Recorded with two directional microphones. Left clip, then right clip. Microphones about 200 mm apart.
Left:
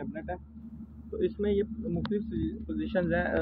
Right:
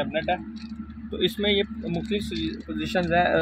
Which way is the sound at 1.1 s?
60° right (ahead or behind).